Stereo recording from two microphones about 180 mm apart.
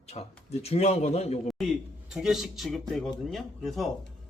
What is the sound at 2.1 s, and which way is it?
Speech, centre (ahead or behind).